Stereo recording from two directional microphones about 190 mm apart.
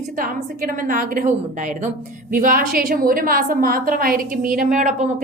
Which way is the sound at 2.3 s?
50° right (ahead or behind).